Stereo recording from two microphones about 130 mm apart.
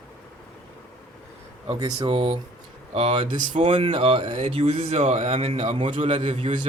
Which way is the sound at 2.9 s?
50° right (ahead or behind).